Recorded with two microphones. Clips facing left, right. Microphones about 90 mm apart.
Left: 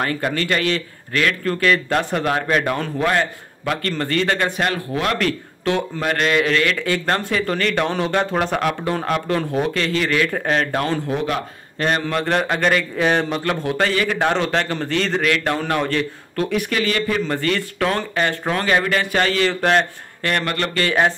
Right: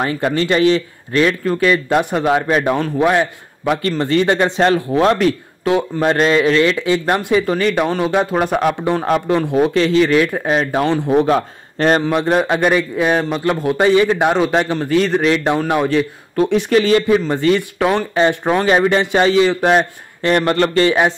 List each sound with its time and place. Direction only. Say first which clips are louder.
0.0 s a man's voice: right 4 dB; 20° right (ahead or behind)
6.0 s a man's voice: right 5 dB; 25° right (ahead or behind)
11.1 s a man's voice: right 9 dB; 35° right (ahead or behind)
12.0 s a man's voice: right 5 dB; 15° right (ahead or behind)
15.2 s a man's voice: right 5 dB; 20° right (ahead or behind)
15.6 s a man's voice: right 5 dB; 10° right (ahead or behind)
16.4 s a man's voice: right 8 dB; 25° right (ahead or behind)
20.4 s a man's voice: right 8 dB; 30° right (ahead or behind)